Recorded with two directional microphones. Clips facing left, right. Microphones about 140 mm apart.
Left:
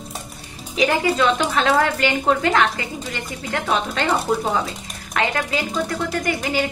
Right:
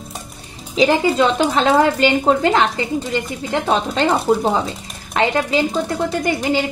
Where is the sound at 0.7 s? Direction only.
25° right (ahead or behind).